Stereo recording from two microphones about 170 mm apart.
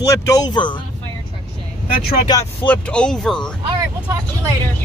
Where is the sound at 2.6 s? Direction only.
5° left (ahead or behind).